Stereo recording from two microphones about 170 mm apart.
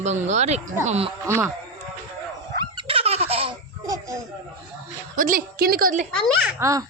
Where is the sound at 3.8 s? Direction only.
20° right (ahead or behind).